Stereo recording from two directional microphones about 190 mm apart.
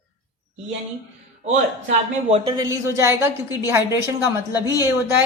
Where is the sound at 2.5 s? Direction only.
15° right (ahead or behind).